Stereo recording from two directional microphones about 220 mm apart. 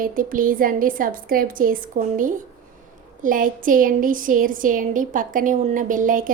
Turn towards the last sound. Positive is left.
turn(degrees=-35)  # may be behind; listen again after turning